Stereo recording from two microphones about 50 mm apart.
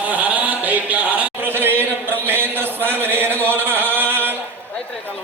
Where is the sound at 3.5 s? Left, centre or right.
Right.